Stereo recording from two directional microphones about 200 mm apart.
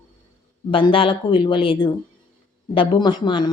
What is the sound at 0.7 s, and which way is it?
Speech, 25° left (ahead or behind).